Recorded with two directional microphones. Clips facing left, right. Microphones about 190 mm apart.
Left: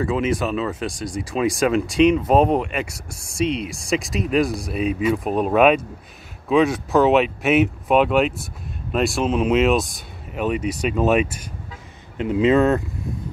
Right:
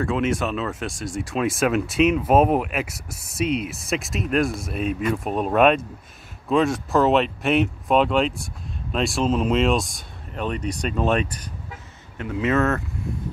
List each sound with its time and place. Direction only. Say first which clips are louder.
0.0 s speech: left 1 dB; centre (ahead or behind)
12.2 s speech: left 5 dB; 20° left (ahead or behind)